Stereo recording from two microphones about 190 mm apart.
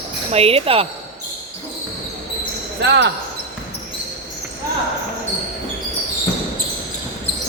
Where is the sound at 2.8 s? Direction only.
65° right (ahead or behind).